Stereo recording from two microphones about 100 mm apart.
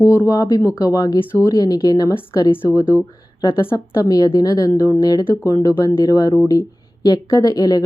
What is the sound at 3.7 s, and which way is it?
A woman's voice, 35° left (ahead or behind).